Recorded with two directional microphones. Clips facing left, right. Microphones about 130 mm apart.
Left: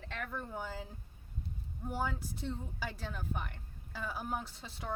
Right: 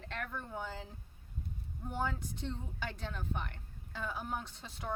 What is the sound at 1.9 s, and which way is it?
Speech, 5° left (ahead or behind).